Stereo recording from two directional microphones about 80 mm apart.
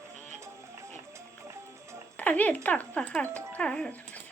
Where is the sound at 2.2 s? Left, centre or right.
Centre.